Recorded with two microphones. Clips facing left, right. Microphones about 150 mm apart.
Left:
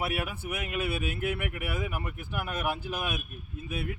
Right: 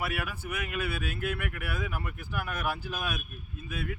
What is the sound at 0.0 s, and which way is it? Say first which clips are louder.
A man's voice: left 2 dB; 25° left (ahead or behind).